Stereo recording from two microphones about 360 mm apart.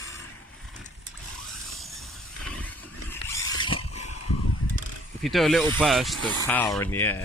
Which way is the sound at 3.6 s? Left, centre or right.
Centre.